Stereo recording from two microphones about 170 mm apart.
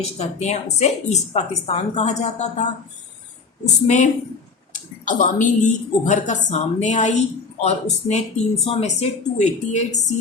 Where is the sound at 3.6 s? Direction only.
45° left (ahead or behind).